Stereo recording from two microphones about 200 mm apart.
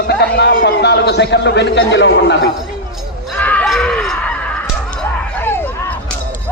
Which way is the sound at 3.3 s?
5° left (ahead or behind).